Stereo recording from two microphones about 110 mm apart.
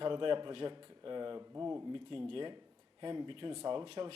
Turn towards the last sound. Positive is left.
turn(degrees=-55)  # may be behind; listen again after turning